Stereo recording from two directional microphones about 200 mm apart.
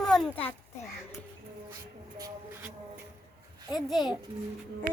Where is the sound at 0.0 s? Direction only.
Centre (ahead or behind).